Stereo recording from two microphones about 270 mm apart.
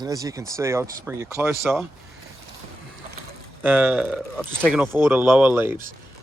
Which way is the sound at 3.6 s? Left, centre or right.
Centre.